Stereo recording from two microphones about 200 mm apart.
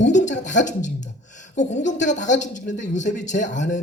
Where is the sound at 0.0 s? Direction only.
40° left (ahead or behind).